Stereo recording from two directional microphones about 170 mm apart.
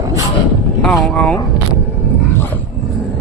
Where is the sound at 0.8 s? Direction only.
5° left (ahead or behind).